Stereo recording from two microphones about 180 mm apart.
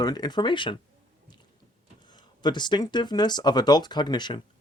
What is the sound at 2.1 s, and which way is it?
Speech, 25° left (ahead or behind).